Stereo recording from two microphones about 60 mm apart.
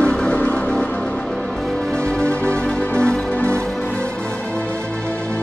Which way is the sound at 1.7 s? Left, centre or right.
Centre.